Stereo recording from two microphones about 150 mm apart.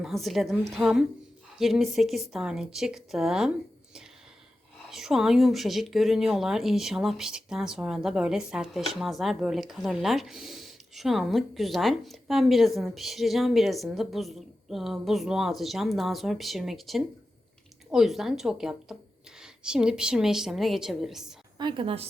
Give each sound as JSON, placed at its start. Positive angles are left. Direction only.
{"t": 0.0, "sound": "a woman's voice", "side_deg": 0}
{"t": 4.9, "sound": "a woman's voice", "side_deg": -5}
{"t": 21.6, "sound": "a woman's voice", "side_deg": -35}